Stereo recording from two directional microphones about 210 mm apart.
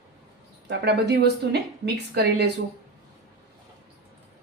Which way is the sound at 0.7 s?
55° right (ahead or behind).